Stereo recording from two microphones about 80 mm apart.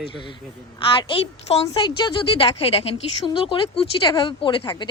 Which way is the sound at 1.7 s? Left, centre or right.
Left.